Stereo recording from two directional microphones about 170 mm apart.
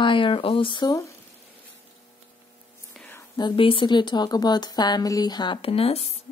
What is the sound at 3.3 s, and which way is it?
Speech, 30° left (ahead or behind).